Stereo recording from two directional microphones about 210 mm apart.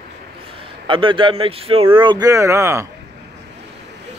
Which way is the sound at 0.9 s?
25° right (ahead or behind).